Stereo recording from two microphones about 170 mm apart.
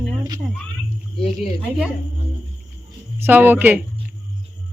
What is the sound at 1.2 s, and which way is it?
Speech, 35° left (ahead or behind).